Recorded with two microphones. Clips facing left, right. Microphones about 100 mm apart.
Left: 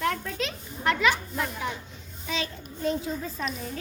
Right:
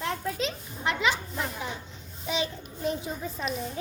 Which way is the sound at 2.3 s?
20° right (ahead or behind).